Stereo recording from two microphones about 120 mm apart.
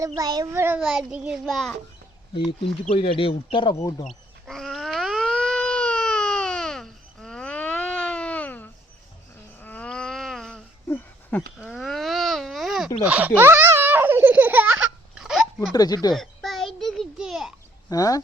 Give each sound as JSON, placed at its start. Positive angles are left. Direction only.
{"t": 0.2, "sound": "a child's voice", "side_deg": -35}
{"t": 0.5, "sound": "a child's voice", "side_deg": -20}
{"t": 0.8, "sound": "child singing", "side_deg": -5}
{"t": 2.9, "sound": "a man's voice", "side_deg": 50}
{"t": 4.0, "sound": "a sound", "side_deg": 5}
{"t": 10.8, "sound": "a sound", "side_deg": 15}
{"t": 11.7, "sound": "baby cry", "side_deg": 0}
{"t": 13.1, "sound": "baby laughter", "side_deg": -15}
{"t": 15.2, "sound": "a sound", "side_deg": 0}
{"t": 15.7, "sound": "speech", "side_deg": 35}
{"t": 16.1, "sound": "a sound", "side_deg": 0}
{"t": 17.8, "sound": "speech", "side_deg": 30}